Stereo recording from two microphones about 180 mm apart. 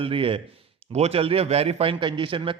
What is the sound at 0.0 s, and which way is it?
A man's voice, 30° right (ahead or behind).